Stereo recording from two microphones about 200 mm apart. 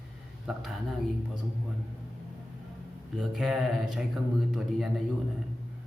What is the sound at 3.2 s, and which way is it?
Speech, centre (ahead or behind).